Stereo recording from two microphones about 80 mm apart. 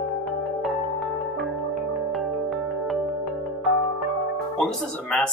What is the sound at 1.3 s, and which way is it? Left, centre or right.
Music, centre.